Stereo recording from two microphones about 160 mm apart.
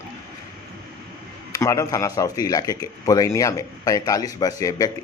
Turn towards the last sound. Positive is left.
turn(degrees=20)  # may be behind; listen again after turning